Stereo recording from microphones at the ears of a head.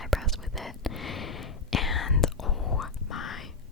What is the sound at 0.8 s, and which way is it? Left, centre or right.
Whispering, left.